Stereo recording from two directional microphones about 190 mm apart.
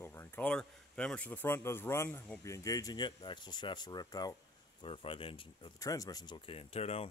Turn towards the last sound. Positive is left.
turn(degrees=30)  # may be behind; listen again after turning